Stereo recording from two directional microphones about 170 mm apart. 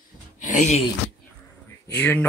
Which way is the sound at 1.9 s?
10° left (ahead or behind).